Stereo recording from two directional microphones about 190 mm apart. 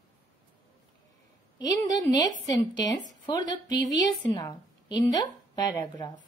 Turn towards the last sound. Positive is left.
turn(degrees=20)  # may be behind; listen again after turning